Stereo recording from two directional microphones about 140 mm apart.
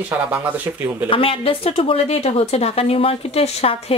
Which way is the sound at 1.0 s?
40° left (ahead or behind).